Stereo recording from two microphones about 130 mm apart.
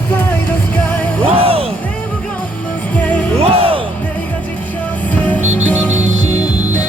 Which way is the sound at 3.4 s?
45° right (ahead or behind).